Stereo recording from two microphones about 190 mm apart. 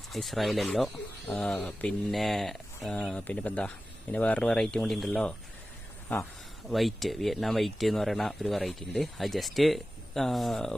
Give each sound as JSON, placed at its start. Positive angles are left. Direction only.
{"t": 0.1, "sound": "speech", "side_deg": 0}